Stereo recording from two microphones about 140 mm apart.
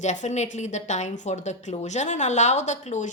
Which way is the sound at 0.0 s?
60° left (ahead or behind).